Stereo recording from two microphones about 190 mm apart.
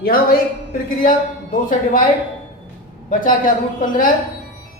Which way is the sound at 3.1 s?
45° left (ahead or behind).